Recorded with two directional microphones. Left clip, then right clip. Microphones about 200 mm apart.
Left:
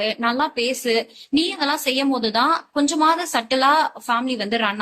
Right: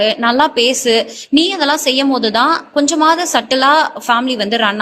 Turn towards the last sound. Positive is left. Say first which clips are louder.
# right 7 dB
turn(degrees=-35)  # may be behind; listen again after turning